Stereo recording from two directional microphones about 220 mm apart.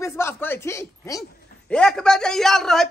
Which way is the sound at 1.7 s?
5° left (ahead or behind).